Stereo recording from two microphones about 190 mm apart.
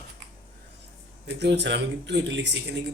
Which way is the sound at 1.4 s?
65° right (ahead or behind).